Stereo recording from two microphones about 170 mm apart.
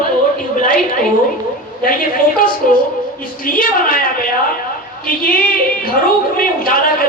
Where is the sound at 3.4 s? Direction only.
55° left (ahead or behind).